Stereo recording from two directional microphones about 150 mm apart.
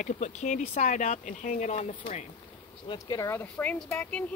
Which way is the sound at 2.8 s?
25° left (ahead or behind).